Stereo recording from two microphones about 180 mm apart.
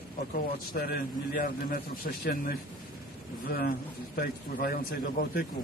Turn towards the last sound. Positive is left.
turn(degrees=55)  # may be behind; listen again after turning